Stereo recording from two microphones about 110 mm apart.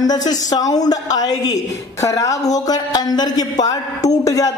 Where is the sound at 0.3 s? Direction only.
35° left (ahead or behind).